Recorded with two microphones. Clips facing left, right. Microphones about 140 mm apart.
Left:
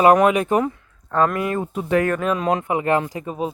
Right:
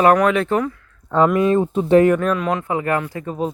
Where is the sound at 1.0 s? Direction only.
15° right (ahead or behind).